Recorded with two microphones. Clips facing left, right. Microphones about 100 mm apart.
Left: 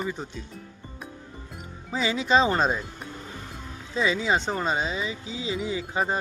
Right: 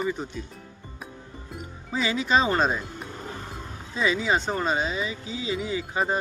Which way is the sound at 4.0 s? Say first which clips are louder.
Even; 25° left (ahead or behind).